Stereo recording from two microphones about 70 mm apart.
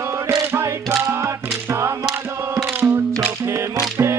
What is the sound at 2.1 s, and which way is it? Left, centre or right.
Chant, right.